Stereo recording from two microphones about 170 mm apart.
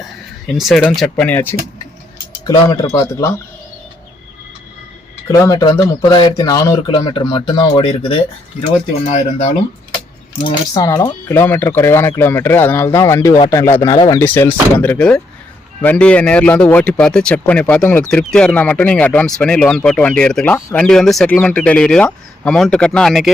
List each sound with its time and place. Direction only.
0.0 s speech: centre (ahead or behind)
2.4 s speech: 20° left (ahead or behind)
5.3 s speech: 20° left (ahead or behind)
9.0 s speech: 45° left (ahead or behind)
10.4 s speech: 25° left (ahead or behind)
13.9 s speech: 30° left (ahead or behind)
14.2 s speech: 15° left (ahead or behind)